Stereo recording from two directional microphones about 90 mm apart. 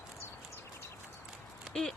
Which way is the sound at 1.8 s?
10° left (ahead or behind).